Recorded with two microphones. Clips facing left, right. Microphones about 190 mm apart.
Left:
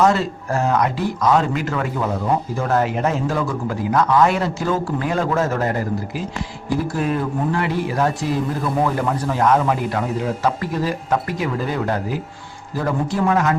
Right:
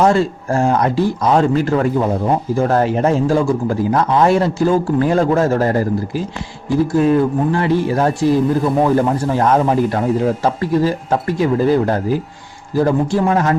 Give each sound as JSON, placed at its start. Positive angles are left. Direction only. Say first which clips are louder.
{"t": 0.0, "sound": "a man's voice", "louder": "right 3 dB", "side_deg": -30}